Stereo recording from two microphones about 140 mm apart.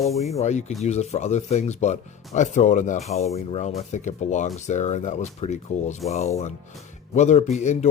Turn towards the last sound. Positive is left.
turn(degrees=55)  # may be behind; listen again after turning